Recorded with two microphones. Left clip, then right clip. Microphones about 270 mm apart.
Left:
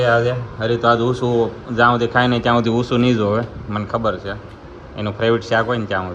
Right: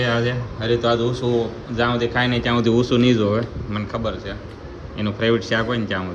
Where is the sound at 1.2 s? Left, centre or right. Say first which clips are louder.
Even; left.